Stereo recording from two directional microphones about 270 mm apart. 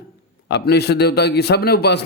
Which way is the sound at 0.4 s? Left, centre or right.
Left.